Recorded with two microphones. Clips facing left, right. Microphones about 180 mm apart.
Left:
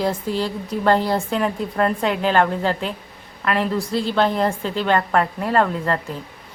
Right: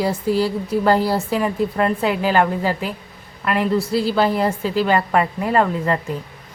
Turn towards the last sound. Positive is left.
turn(degrees=-5)  # may be behind; listen again after turning